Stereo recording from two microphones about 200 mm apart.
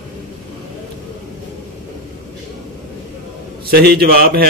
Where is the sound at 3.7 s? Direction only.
50° right (ahead or behind).